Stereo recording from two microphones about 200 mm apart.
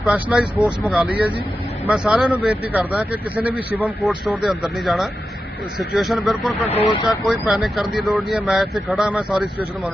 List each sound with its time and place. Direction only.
0.0 s speech: 5° right (ahead or behind)
6.8 s speech: 20° left (ahead or behind)
7.3 s speech: centre (ahead or behind)